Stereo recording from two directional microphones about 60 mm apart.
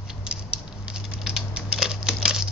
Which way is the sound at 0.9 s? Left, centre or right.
Centre.